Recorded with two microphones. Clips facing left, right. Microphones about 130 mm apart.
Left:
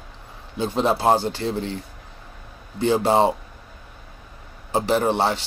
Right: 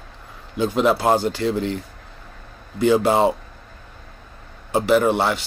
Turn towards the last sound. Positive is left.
turn(degrees=35)  # may be behind; listen again after turning